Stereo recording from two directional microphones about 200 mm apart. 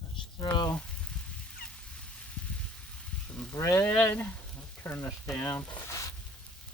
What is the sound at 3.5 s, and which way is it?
Speech, 15° left (ahead or behind).